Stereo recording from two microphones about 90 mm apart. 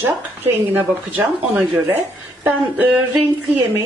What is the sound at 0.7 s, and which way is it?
A woman's voice, 20° right (ahead or behind).